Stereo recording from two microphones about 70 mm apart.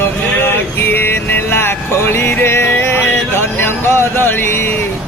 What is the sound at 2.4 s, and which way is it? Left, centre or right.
Music, left.